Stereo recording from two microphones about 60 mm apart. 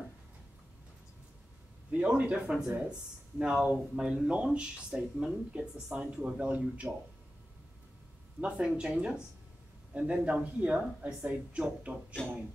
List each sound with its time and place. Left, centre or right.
1.9 s speech: right
8.5 s speech: centre